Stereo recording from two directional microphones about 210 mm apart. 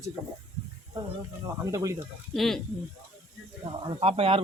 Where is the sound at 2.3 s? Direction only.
Centre (ahead or behind).